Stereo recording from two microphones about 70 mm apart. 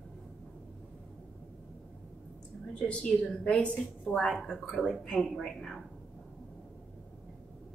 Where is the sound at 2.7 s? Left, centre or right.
Centre.